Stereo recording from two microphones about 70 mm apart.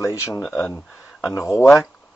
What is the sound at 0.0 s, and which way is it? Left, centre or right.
Speech, left.